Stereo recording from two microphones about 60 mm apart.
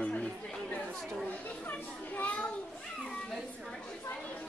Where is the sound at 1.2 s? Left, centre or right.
Left.